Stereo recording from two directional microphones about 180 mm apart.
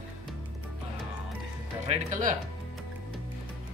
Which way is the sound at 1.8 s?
45° right (ahead or behind).